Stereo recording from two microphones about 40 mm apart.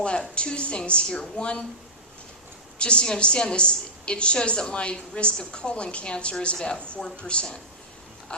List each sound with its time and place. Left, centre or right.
0.0 s a woman's voice: left
2.7 s a woman's voice: left
8.3 s a sound: left